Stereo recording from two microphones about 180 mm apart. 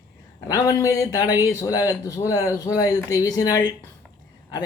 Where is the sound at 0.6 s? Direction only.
20° left (ahead or behind).